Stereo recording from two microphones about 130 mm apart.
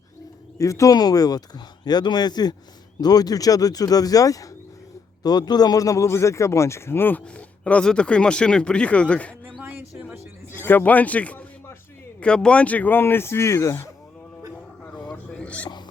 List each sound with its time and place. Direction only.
0.6 s a man's voice: 25° left (ahead or behind); by 9.6 s 10° left (ahead or behind)
9.6 s music: 10° right (ahead or behind)
10.5 s a man's voice: 15° left (ahead or behind)
15.1 s hiccup: 10° left (ahead or behind)